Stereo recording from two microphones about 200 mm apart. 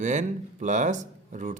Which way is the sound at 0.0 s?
40° right (ahead or behind).